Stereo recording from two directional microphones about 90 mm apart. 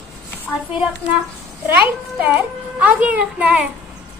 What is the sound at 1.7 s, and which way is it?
A child's voice, 20° right (ahead or behind).